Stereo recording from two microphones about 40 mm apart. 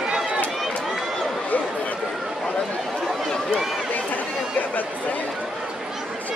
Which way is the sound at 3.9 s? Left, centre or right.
Left.